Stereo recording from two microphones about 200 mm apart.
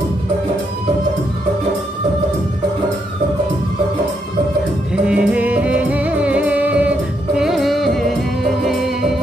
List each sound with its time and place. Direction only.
5.0 s music: 5° right (ahead or behind)